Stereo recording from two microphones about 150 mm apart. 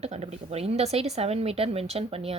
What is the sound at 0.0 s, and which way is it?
Speech, 45° right (ahead or behind).